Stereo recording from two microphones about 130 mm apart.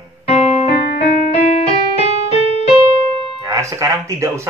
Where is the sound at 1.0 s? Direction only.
75° left (ahead or behind).